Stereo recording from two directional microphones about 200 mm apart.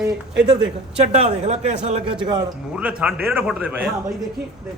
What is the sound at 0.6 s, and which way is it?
Speech, 30° right (ahead or behind).